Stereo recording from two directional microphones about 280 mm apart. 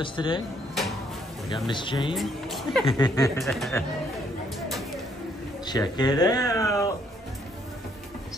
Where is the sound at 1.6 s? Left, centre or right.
Centre.